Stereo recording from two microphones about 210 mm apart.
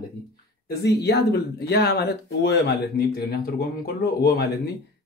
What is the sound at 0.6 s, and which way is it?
Speech, 50° left (ahead or behind).